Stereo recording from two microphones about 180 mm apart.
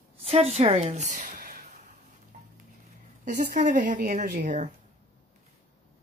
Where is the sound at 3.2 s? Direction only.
50° right (ahead or behind).